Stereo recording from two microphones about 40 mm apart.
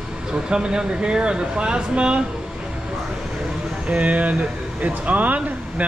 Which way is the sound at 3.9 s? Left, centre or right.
Right.